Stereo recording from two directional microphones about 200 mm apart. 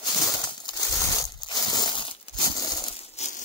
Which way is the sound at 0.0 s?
20° left (ahead or behind).